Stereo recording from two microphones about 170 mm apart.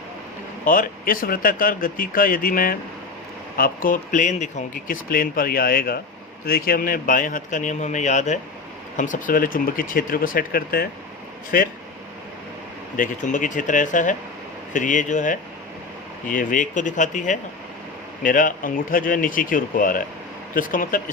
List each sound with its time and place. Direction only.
0.6 s speech: 55° left (ahead or behind)
13.0 s speech: 50° left (ahead or behind)